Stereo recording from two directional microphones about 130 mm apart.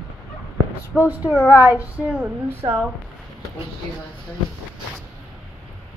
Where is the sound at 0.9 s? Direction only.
15° right (ahead or behind).